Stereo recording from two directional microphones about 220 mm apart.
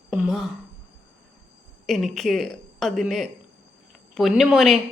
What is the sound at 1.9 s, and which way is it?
A woman's voice, centre (ahead or behind).